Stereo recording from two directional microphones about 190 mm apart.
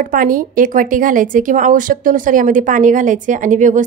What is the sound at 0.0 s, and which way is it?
A woman's voice, 45° right (ahead or behind).